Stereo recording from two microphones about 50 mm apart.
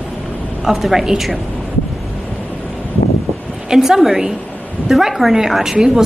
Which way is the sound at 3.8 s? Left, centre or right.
Centre.